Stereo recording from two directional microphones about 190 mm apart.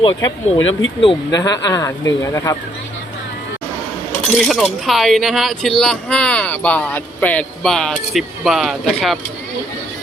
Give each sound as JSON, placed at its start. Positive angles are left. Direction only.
{"t": 0.0, "sound": "speech", "side_deg": 25}
{"t": 4.4, "sound": "speech", "side_deg": 0}